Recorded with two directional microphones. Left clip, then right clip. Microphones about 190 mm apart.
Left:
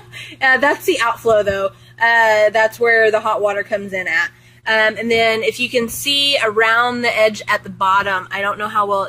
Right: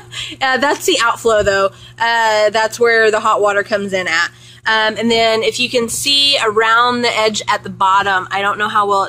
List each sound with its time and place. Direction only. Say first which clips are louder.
0.4 s speech: left 1 dB; centre (ahead or behind)
6.0 s a sound: right 4 dB; 45° right (ahead or behind)
6.3 s speech: right 2 dB; 5° left (ahead or behind)